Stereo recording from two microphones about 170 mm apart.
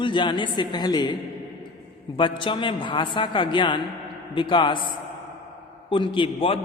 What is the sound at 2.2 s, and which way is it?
A man's voice, 30° left (ahead or behind).